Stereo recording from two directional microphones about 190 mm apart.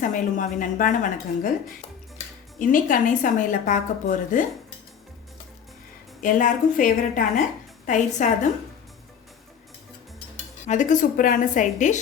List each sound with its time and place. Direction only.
0.0 s speech: 45° left (ahead or behind)
6.2 s speech: 45° left (ahead or behind)
10.7 s speech: 40° left (ahead or behind)